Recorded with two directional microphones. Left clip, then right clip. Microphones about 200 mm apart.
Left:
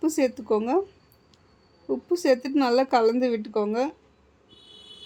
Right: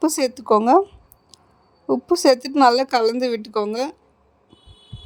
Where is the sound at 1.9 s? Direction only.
40° right (ahead or behind).